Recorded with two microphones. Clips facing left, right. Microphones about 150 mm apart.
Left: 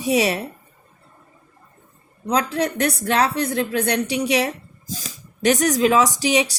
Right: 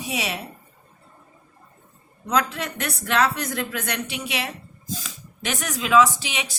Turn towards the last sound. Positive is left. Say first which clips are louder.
# left 12 dB
turn(degrees=40)  # may be behind; listen again after turning